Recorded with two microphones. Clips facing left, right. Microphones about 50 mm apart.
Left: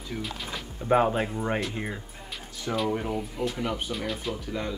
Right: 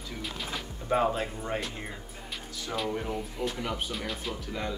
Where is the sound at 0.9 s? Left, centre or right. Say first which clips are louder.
Left 4 dB; left.